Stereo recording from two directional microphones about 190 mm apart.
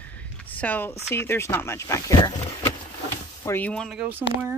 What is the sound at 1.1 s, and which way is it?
Speech, 15° left (ahead or behind).